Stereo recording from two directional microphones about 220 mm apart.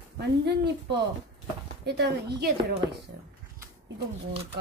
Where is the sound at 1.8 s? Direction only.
50° right (ahead or behind).